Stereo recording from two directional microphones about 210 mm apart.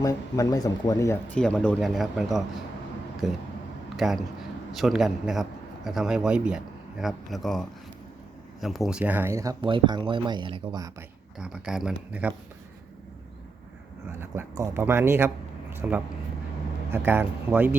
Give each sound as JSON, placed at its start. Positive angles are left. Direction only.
{"t": 0.0, "sound": "a man's voice", "side_deg": 15}
{"t": 11.3, "sound": "a man's voice", "side_deg": -5}
{"t": 14.2, "sound": "a man's voice", "side_deg": -10}